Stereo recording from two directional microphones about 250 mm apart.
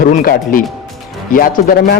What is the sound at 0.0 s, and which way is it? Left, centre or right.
A man's voice, left.